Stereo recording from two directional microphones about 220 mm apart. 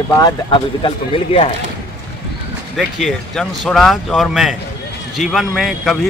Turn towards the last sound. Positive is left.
turn(degrees=0)  # may be behind; listen again after turning